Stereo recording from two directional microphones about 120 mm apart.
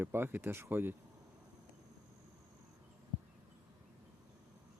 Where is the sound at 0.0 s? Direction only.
20° right (ahead or behind).